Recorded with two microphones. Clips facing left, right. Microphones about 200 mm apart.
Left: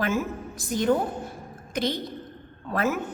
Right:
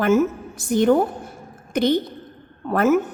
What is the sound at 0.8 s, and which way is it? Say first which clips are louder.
Speech: right 7 dB; 60° right (ahead or behind).